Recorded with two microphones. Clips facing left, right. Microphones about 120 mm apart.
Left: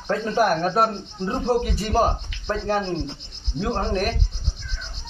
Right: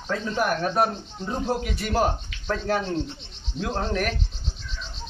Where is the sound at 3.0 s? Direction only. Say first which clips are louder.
Right 1 dB; 80° left.